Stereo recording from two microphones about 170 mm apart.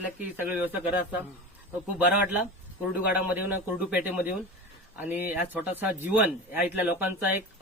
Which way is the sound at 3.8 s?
10° right (ahead or behind).